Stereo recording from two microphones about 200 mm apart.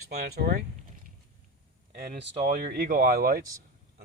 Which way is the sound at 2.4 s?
40° right (ahead or behind).